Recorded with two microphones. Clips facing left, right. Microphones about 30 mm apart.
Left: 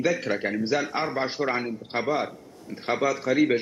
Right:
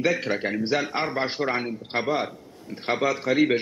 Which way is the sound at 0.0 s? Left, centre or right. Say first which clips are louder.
Right 1 dB; right.